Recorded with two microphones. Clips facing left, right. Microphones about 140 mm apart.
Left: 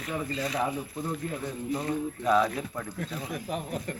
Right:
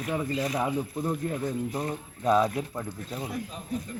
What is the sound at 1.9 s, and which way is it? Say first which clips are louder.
Speech: even; 30° right (ahead or behind).